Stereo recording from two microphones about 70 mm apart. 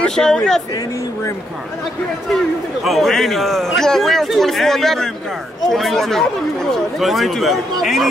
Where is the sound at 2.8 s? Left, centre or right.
Centre.